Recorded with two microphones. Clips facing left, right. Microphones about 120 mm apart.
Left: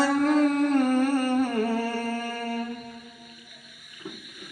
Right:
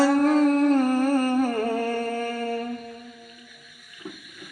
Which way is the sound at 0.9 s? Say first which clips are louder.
Right 1 dB; 35° right (ahead or behind).